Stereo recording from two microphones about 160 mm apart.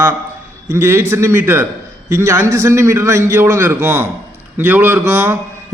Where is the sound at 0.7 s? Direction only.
15° right (ahead or behind).